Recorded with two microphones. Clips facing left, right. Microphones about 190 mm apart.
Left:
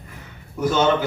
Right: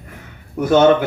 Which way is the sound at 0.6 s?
55° right (ahead or behind).